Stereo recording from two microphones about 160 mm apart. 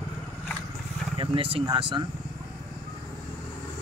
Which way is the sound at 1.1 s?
35° right (ahead or behind).